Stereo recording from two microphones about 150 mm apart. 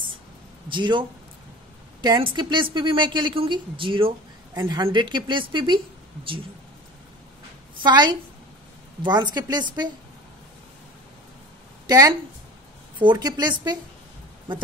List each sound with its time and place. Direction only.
0.7 s a woman's voice: 30° right (ahead or behind)
4.6 s a woman's voice: 25° right (ahead or behind)
7.8 s a woman's voice: 30° right (ahead or behind)
11.9 s a woman's voice: 25° right (ahead or behind)